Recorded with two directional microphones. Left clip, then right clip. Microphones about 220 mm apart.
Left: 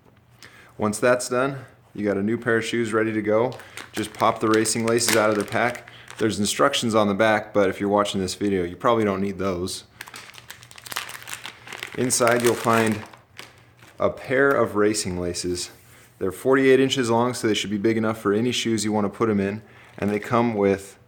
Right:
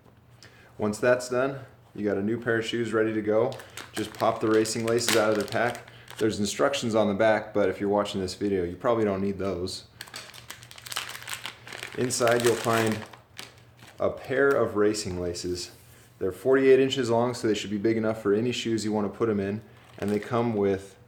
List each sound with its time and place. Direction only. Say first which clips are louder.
0.8 s speech: left 3 dB; 45° left (ahead or behind)
5.3 s speech: left 3 dB; 10° left (ahead or behind)
5.7 s a sound: left 3 dB; 15° left (ahead or behind)
6.2 s speech: left 4 dB; 40° left (ahead or behind)
10.8 s crumpling: left 3 dB; 15° left (ahead or behind)
11.9 s speech: left 4 dB; 45° left (ahead or behind)
12.4 s speech: left 3 dB; 5° left (ahead or behind)
12.6 s speech: left 5 dB; 50° left (ahead or behind)
12.9 s crumpling: left 3 dB; centre (ahead or behind)
14.0 s speech: left 4 dB; 45° left (ahead or behind)